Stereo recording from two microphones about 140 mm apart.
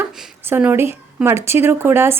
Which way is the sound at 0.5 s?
15° right (ahead or behind).